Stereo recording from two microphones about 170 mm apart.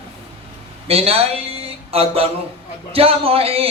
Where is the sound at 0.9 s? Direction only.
35° right (ahead or behind).